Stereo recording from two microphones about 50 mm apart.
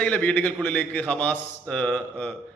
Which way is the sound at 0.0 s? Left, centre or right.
Left.